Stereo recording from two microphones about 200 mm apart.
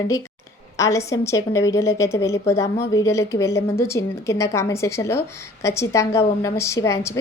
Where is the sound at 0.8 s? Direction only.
15° left (ahead or behind).